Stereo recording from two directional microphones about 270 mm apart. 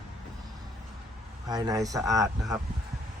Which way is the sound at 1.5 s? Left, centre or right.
Centre.